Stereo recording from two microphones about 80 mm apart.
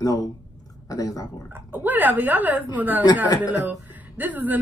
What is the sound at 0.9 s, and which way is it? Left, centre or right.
Speech, left.